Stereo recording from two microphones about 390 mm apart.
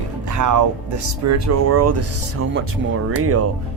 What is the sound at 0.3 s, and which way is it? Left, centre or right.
Speech, right.